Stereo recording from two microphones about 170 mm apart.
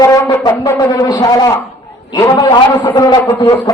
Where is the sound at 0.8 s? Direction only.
25° left (ahead or behind).